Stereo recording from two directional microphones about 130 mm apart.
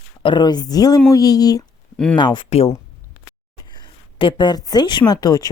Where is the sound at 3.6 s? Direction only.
35° left (ahead or behind).